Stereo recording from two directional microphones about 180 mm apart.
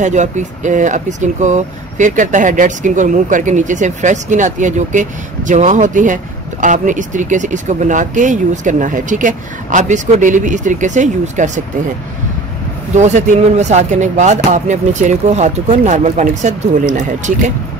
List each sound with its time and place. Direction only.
0.0 s speech: 40° right (ahead or behind)
12.9 s speech: 40° right (ahead or behind)